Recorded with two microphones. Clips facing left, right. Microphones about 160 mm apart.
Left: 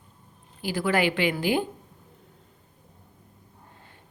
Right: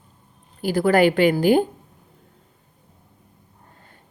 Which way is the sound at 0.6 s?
40° right (ahead or behind).